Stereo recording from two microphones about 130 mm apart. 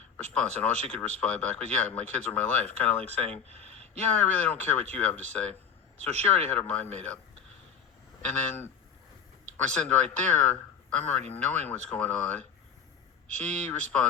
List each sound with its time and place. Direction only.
0.3 s speech: 5° left (ahead or behind)
3.6 s a sound: 50° right (ahead or behind)
4.1 s speech: 10° left (ahead or behind)
6.5 s speech: 10° left (ahead or behind)
8.2 s speech: 15° left (ahead or behind)